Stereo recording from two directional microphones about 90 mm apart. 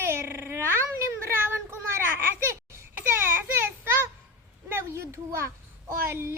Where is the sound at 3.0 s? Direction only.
25° right (ahead or behind).